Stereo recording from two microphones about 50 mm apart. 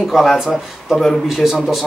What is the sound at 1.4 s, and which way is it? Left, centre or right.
Speech, centre.